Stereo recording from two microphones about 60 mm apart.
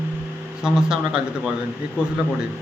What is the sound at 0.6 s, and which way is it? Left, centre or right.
Speech, centre.